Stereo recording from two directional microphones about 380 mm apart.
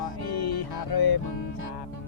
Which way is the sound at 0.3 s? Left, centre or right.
Left.